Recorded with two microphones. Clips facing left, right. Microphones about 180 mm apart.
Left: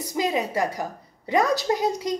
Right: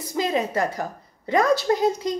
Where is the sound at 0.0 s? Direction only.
15° left (ahead or behind).